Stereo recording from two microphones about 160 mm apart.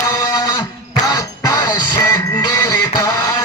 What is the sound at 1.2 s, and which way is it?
Music, 20° left (ahead or behind).